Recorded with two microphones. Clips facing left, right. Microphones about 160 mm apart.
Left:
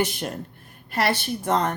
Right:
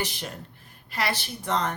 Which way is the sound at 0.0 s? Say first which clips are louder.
Left 7 dB; 50° left (ahead or behind).